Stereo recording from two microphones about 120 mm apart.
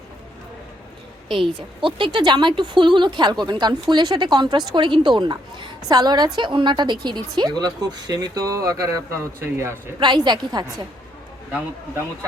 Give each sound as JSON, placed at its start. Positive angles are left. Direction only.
{"t": 1.5, "sound": "a man's voice", "side_deg": -45}
{"t": 10.0, "sound": "speech", "side_deg": -40}